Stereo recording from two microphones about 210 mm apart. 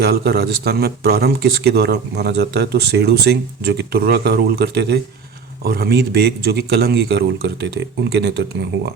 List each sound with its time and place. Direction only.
0.0 s speech: 50° right (ahead or behind)